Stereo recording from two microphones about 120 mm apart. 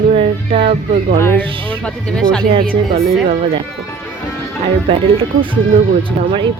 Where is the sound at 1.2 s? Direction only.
20° left (ahead or behind).